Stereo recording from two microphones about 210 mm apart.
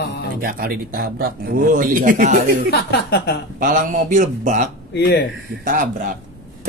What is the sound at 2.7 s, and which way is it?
Speech, 50° left (ahead or behind).